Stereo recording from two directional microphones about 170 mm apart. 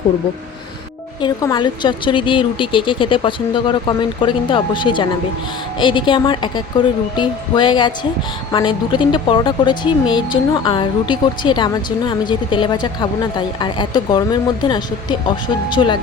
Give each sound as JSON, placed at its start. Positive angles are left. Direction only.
{"t": 1.2, "sound": "speech", "side_deg": 25}